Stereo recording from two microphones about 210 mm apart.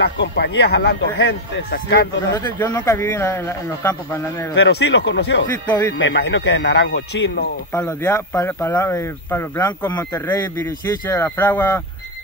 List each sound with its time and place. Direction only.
0.0 s speech: 55° left (ahead or behind)
2.3 s speech: 15° left (ahead or behind)
4.6 s speech: 55° left (ahead or behind)
7.7 s speech: 10° left (ahead or behind)